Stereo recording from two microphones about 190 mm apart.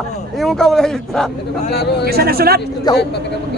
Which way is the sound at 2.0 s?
55° right (ahead or behind).